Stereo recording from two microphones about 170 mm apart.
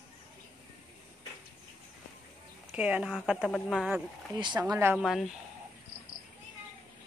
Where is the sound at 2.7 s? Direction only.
5° right (ahead or behind).